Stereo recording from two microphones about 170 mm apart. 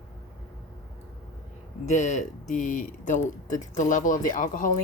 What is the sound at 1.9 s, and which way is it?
Speech, 45° left (ahead or behind).